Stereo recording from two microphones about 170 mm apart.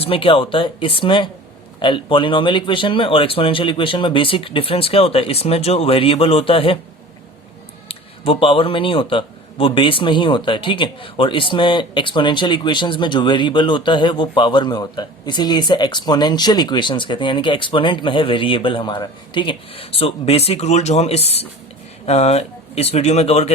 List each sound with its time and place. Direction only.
0.0 s speech: 30° left (ahead or behind)
7.9 s speech: 35° left (ahead or behind)